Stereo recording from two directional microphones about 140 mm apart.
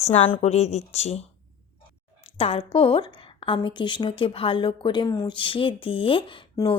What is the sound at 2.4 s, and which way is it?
Speech, 45° left (ahead or behind).